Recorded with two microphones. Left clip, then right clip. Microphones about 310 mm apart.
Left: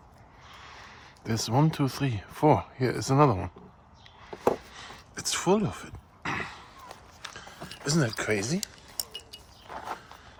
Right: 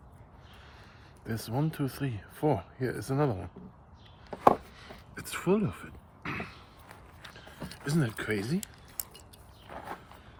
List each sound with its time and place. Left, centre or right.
0.6 s speech: left
4.4 s chopping: centre
7.9 s chink: centre